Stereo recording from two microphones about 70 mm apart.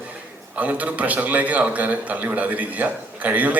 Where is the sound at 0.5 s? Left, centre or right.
Right.